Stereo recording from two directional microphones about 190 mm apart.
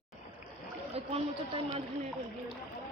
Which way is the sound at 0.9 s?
30° right (ahead or behind).